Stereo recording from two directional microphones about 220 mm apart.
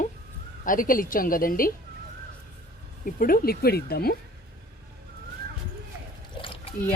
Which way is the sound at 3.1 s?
40° left (ahead or behind).